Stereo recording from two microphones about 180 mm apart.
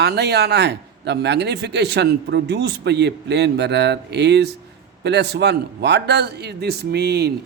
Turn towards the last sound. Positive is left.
turn(degrees=-60)  # may be behind; listen again after turning